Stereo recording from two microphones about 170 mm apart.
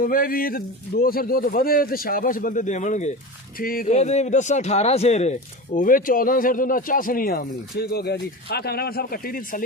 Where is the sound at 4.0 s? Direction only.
40° left (ahead or behind).